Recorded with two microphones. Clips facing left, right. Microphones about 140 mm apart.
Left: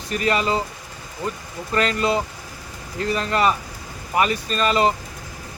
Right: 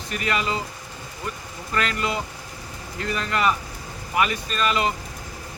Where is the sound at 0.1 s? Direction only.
35° left (ahead or behind).